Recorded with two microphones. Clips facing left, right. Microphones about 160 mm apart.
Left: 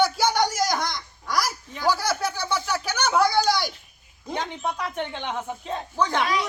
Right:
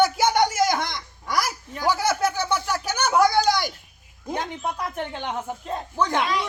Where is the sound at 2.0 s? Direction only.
50° right (ahead or behind).